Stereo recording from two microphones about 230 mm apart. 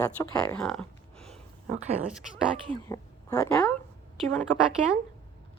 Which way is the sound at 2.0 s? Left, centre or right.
Centre.